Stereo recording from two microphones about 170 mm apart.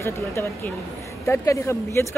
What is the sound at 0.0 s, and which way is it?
A woman's voice, 15° left (ahead or behind).